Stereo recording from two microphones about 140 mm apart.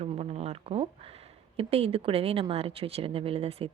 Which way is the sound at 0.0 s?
45° right (ahead or behind).